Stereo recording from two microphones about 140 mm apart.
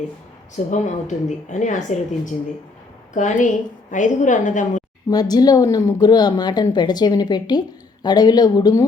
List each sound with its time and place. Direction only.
0.5 s speech: 60° left (ahead or behind)
5.1 s speech: 30° left (ahead or behind)